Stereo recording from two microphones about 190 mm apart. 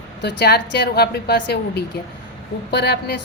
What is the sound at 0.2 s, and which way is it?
A woman's voice, 65° left (ahead or behind).